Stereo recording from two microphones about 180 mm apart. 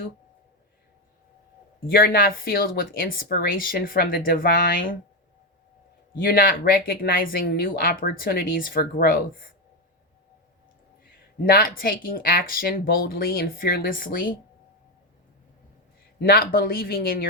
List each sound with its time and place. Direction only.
1.9 s speech: 55° left (ahead or behind)
6.2 s speech: 55° left (ahead or behind)
11.4 s speech: 55° left (ahead or behind)
16.2 s speech: 55° left (ahead or behind)